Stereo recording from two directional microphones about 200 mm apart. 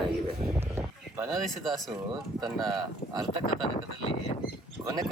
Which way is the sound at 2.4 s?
20° right (ahead or behind).